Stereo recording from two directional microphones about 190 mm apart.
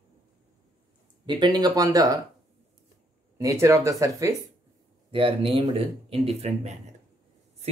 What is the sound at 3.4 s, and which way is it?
Speech, 15° right (ahead or behind).